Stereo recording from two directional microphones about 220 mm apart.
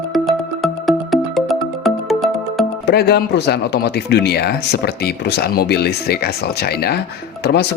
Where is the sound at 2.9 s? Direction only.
45° left (ahead or behind).